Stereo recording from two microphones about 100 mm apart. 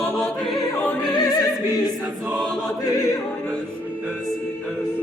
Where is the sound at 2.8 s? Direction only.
35° left (ahead or behind).